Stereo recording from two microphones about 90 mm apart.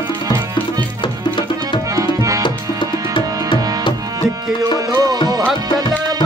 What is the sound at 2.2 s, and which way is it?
Tabla, 40° right (ahead or behind).